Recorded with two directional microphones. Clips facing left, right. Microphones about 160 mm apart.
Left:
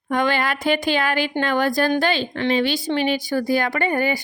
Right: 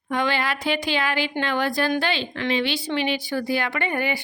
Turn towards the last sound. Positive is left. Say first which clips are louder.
# left 4 dB
turn(degrees=40)  # may be behind; listen again after turning